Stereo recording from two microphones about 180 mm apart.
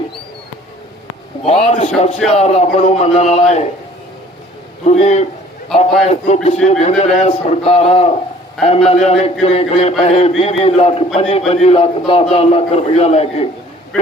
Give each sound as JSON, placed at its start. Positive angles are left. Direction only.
{"t": 1.5, "sound": "a man's voice", "side_deg": 35}
{"t": 4.9, "sound": "a man's voice", "side_deg": 40}